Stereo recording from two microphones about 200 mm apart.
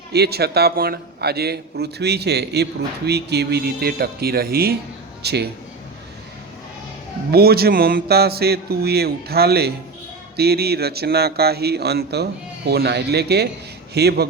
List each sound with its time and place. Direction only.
0.1 s a man's voice: 55° right (ahead or behind)
7.3 s a man's voice: 50° right (ahead or behind)